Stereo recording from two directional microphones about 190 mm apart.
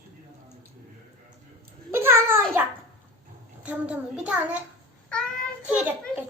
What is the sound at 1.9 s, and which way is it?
A child's voice, 10° right (ahead or behind).